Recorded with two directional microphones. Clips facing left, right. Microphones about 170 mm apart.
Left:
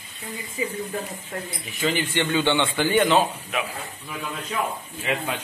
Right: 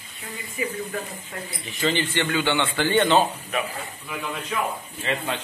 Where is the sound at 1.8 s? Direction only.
10° left (ahead or behind).